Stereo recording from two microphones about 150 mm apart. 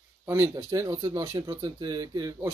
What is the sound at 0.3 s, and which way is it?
A man's voice, 15° right (ahead or behind).